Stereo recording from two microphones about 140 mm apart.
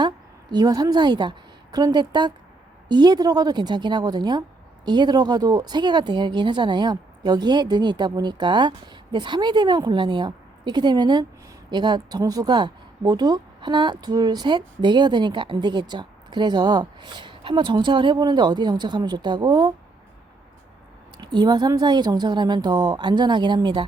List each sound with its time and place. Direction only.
0.5 s a woman's voice: 25° right (ahead or behind)
21.2 s speech: 30° right (ahead or behind)